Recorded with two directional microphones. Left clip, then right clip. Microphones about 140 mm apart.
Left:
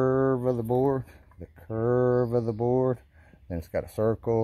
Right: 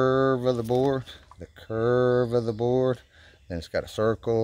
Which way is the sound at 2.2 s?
10° left (ahead or behind).